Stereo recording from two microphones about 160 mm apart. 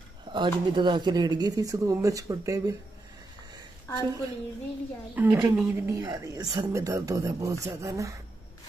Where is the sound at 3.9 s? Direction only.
20° left (ahead or behind).